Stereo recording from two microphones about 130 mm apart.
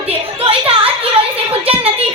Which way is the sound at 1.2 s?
45° right (ahead or behind).